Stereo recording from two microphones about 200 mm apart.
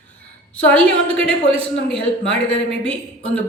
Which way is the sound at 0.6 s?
5° left (ahead or behind).